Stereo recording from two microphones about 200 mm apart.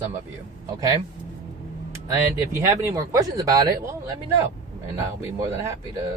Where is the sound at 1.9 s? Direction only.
15° right (ahead or behind).